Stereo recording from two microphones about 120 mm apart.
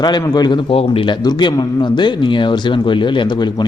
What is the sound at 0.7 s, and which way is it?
Speech, 50° left (ahead or behind).